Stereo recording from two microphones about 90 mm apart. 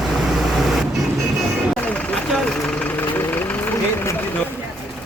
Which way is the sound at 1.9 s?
10° left (ahead or behind).